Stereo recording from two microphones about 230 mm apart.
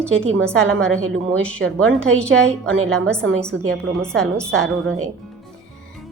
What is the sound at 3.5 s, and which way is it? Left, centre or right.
Speech, right.